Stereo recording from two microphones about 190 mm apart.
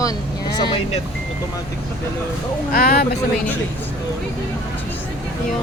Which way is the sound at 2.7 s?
50° left (ahead or behind).